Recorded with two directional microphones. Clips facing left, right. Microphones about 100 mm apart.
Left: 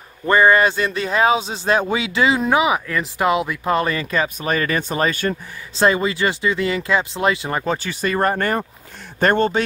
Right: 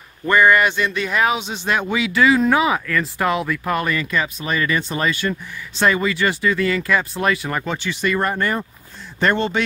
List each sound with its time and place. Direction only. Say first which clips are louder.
0.3 s speech: left 1 dB; 30° left (ahead or behind)
5.8 s speech: left 1 dB; 30° left (ahead or behind)
7.6 s speech: left 1 dB; 40° left (ahead or behind)